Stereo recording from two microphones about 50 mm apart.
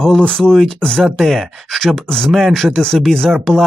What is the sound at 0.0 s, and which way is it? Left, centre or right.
Speech, centre.